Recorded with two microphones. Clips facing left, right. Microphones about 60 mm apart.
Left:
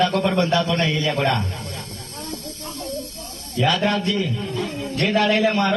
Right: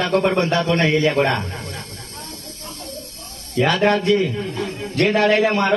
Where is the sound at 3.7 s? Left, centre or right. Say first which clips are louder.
Right 6 dB; right.